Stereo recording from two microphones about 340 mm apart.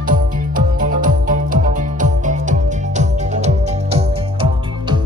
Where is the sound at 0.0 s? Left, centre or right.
Right.